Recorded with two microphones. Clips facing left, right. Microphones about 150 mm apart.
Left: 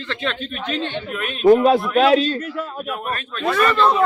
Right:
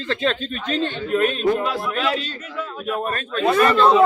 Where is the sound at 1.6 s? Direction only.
60° left (ahead or behind).